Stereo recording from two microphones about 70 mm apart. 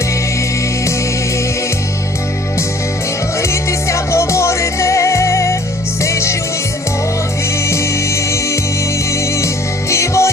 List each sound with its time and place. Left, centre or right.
3.5 s music: left
7.7 s music: left
9.9 s music: left